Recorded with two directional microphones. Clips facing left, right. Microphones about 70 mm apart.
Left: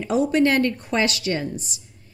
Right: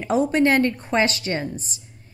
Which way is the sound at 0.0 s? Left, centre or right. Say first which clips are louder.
Even; right.